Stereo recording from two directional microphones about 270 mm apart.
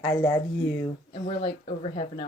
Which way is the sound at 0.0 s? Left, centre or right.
Centre.